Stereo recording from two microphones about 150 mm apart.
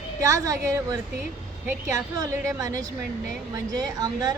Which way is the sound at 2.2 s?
20° right (ahead or behind).